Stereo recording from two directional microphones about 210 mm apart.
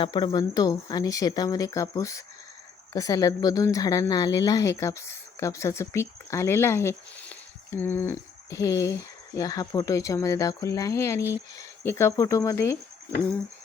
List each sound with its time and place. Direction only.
0.0 s speech: 20° left (ahead or behind)